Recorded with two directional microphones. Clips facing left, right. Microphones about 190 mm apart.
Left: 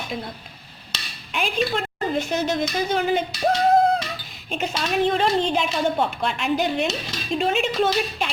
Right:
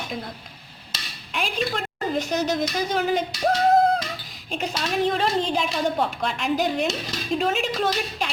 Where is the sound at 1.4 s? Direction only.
Centre (ahead or behind).